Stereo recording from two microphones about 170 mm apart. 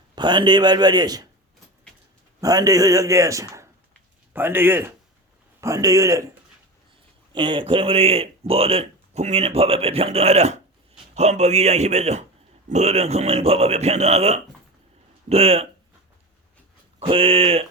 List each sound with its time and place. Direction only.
0.2 s speech: 25° right (ahead or behind)
2.4 s speech: 20° right (ahead or behind)
7.3 s speech: 30° right (ahead or behind)
17.0 s speech: 30° right (ahead or behind)